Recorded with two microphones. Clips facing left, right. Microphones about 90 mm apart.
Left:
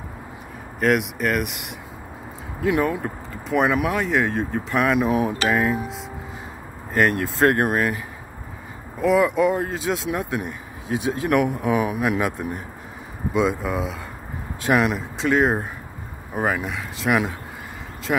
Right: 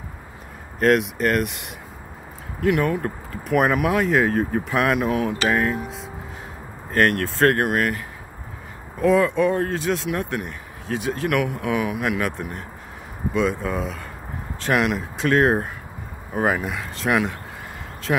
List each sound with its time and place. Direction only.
0.7 s speech: 5° left (ahead or behind)
2.8 s speech: 10° left (ahead or behind)
3.4 s speech: 5° right (ahead or behind)
9.0 s speech: 10° left (ahead or behind)
13.6 s speech: 5° left (ahead or behind)